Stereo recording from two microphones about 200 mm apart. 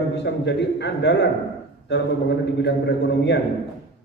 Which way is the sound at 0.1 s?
60° left (ahead or behind).